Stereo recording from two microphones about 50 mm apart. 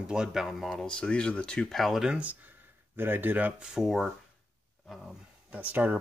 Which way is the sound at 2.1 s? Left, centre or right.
Right.